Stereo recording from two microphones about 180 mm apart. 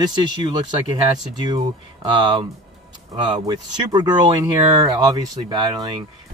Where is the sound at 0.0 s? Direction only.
25° right (ahead or behind).